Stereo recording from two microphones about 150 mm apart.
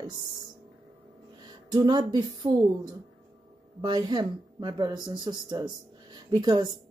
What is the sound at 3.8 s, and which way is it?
A woman's voice, 30° right (ahead or behind).